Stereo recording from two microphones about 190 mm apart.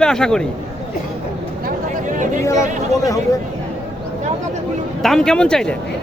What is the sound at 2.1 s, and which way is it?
Chatter, 40° right (ahead or behind).